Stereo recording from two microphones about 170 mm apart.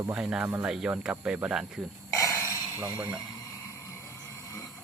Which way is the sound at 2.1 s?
15° left (ahead or behind).